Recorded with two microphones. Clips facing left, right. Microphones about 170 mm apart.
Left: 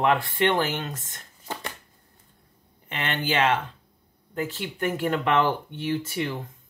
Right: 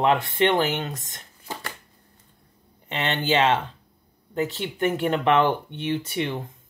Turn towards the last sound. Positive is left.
turn(degrees=-20)  # may be behind; listen again after turning